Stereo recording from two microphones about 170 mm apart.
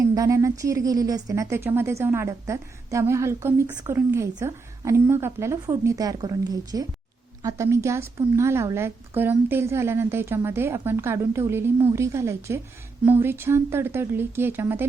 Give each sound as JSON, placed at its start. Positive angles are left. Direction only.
{"t": 0.1, "sound": "speech", "side_deg": -20}